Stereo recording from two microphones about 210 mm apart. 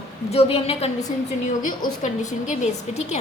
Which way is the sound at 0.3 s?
30° left (ahead or behind).